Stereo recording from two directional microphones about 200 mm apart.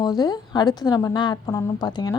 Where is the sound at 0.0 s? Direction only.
20° left (ahead or behind).